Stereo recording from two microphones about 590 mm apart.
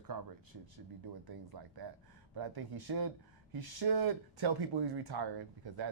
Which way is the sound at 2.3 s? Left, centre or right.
Right.